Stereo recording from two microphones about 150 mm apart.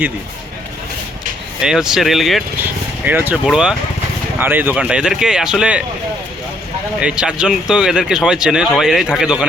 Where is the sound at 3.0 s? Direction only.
10° right (ahead or behind).